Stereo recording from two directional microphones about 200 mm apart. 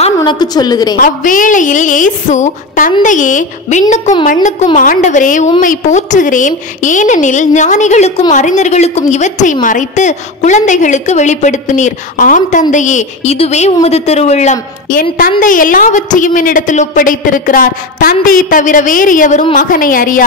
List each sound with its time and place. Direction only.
0.0 s a woman's voice: 25° left (ahead or behind)
0.9 s a woman's voice: 40° left (ahead or behind)